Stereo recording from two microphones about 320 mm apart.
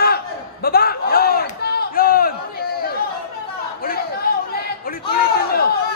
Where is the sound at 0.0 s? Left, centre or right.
Left.